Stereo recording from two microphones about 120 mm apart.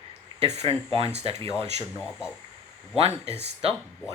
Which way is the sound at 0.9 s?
50° right (ahead or behind).